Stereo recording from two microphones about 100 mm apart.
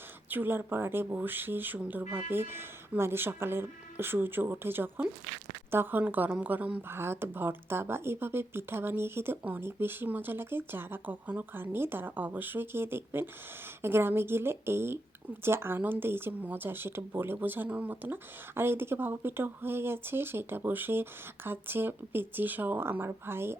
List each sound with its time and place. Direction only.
0.3 s a woman's voice: 20° right (ahead or behind)